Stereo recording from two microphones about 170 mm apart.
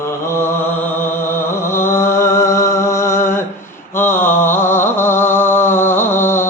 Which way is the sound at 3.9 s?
15° left (ahead or behind).